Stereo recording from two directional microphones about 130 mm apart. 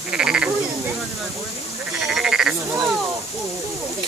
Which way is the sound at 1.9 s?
5° right (ahead or behind).